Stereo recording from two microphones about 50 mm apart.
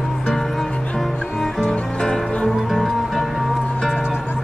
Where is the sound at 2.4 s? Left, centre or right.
Centre.